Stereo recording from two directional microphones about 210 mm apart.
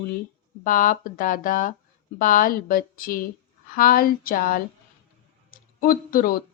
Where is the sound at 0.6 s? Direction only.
40° left (ahead or behind).